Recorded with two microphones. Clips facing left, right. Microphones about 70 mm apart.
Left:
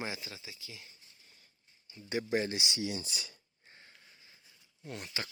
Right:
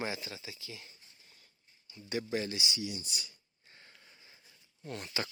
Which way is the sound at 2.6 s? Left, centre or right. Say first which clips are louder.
Left 2 dB; left.